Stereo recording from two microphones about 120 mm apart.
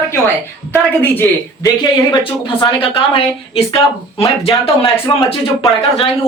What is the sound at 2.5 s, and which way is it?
A woman's voice, 50° left (ahead or behind).